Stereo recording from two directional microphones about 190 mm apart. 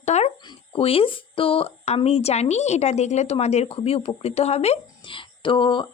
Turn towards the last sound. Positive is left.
turn(degrees=25)  # may be behind; listen again after turning